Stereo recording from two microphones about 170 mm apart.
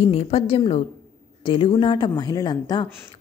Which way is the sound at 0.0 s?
35° left (ahead or behind).